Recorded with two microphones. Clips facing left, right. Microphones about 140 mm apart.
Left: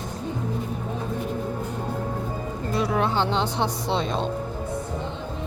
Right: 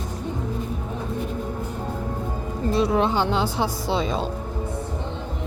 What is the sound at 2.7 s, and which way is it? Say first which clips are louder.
Music: right 3 dB; 25° right (ahead or behind).